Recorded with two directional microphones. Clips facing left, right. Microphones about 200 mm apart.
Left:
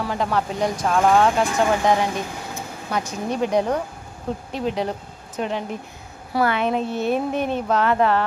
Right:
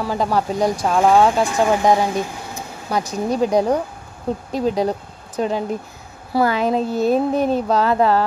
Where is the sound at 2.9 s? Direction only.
35° right (ahead or behind).